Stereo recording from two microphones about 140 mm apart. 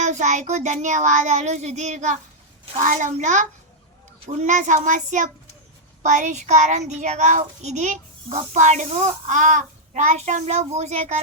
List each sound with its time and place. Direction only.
0.0 s a child's voice: 60° right (ahead or behind)